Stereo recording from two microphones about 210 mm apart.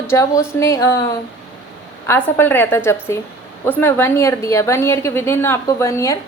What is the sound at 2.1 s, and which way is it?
A woman's voice, 10° left (ahead or behind).